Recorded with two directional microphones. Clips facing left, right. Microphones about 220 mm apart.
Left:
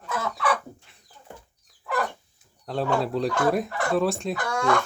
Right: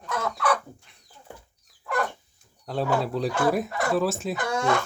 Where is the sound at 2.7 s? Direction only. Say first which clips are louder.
Left 1 dB; centre (ahead or behind).